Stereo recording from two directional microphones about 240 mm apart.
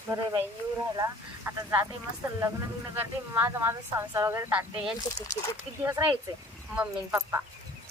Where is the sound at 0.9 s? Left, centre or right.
Centre.